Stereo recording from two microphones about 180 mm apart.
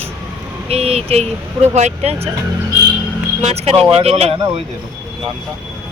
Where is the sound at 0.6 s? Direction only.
35° right (ahead or behind).